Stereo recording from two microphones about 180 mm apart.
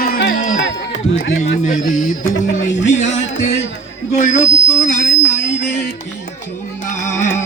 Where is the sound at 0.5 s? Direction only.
90° left.